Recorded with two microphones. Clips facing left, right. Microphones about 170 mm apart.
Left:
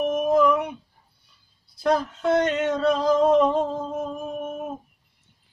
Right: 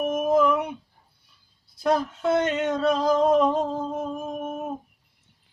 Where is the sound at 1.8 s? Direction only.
5° right (ahead or behind).